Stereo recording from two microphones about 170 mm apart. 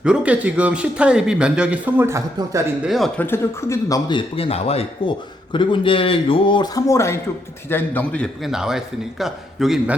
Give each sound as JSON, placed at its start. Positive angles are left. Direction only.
{"t": 0.0, "sound": "speech", "side_deg": -5}
{"t": 2.8, "sound": "a man's voice", "side_deg": 0}
{"t": 3.2, "sound": "speech", "side_deg": 15}
{"t": 4.4, "sound": "a man's voice", "side_deg": 35}
{"t": 8.4, "sound": "a man's voice", "side_deg": -5}